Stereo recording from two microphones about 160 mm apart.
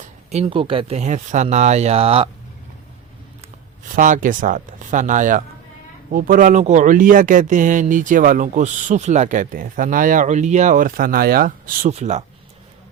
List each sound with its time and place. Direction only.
0.3 s speech: 40° right (ahead or behind)
3.9 s speech: 55° right (ahead or behind)
11.9 s speech: 45° right (ahead or behind)